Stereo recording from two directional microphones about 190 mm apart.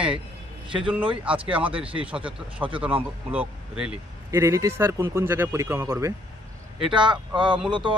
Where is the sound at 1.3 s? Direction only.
25° right (ahead or behind).